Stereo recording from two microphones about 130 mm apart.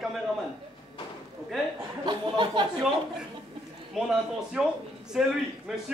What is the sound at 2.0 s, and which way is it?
Speech, 40° right (ahead or behind).